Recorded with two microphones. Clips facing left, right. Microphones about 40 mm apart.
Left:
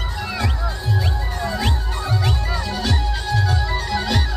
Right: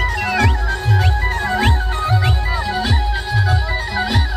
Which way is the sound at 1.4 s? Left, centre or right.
Right.